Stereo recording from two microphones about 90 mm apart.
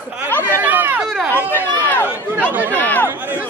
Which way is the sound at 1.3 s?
20° left (ahead or behind).